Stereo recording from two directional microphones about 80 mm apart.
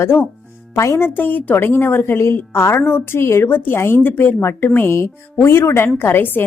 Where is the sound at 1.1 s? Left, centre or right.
Left.